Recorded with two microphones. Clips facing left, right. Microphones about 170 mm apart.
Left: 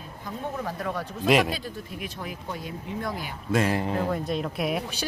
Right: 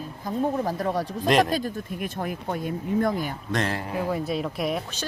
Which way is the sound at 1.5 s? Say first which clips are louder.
Right 7 dB; 50° right (ahead or behind).